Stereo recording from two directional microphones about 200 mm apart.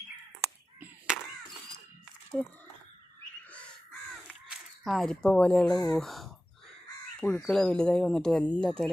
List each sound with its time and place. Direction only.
0.8 s crow: 5° right (ahead or behind)
2.3 s speech: centre (ahead or behind)
4.3 s a sound: centre (ahead or behind)
5.7 s speech: 20° left (ahead or behind)
6.0 s speech: centre (ahead or behind)